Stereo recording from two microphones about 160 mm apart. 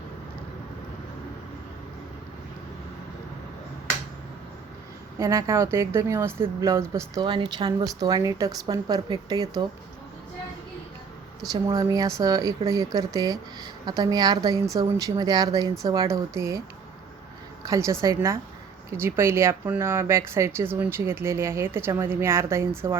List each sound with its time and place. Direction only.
5.2 s speech: 20° right (ahead or behind)
7.3 s speech: 30° right (ahead or behind)
11.5 s speech: 25° right (ahead or behind)
17.7 s speech: 20° right (ahead or behind)